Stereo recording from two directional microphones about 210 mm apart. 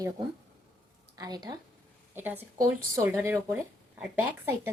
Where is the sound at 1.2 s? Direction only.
20° right (ahead or behind).